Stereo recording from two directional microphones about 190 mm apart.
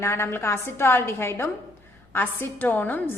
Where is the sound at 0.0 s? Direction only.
15° left (ahead or behind).